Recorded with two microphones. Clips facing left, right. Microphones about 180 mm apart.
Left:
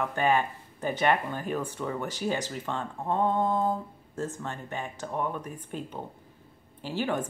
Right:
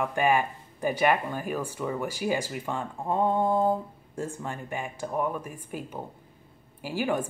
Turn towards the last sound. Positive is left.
turn(degrees=-10)  # may be behind; listen again after turning